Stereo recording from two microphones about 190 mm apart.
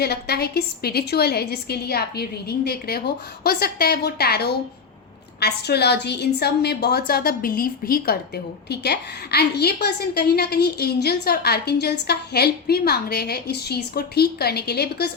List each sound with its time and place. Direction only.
0.0 s a woman's voice: 55° left (ahead or behind)